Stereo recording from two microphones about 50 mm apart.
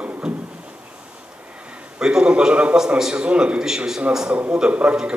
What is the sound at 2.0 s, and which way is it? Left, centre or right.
Speech, centre.